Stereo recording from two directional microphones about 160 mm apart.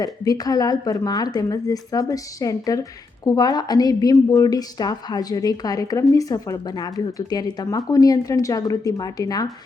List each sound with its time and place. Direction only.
0.0 s a woman's voice: 25° left (ahead or behind)